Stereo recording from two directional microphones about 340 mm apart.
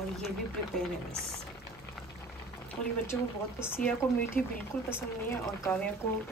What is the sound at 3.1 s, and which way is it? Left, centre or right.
Speech, centre.